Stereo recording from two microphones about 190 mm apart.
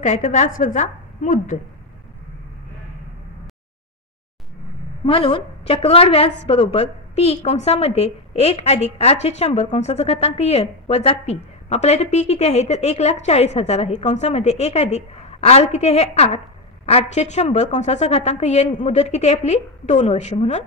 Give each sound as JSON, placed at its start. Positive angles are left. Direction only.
{"t": 0.0, "sound": "a woman's voice", "side_deg": 40}
{"t": 5.0, "sound": "a woman's voice", "side_deg": 30}